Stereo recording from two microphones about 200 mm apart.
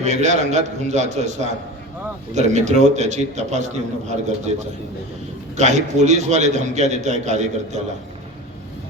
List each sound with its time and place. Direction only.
0.0 s a man's voice: 35° right (ahead or behind)
5.5 s a man's voice: 35° right (ahead or behind)